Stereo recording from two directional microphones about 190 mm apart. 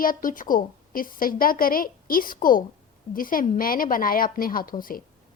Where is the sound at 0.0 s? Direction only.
45° left (ahead or behind).